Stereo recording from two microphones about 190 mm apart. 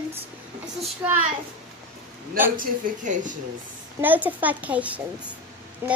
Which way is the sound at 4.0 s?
10° right (ahead or behind).